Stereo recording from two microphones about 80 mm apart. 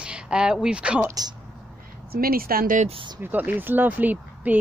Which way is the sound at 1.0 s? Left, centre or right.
Right.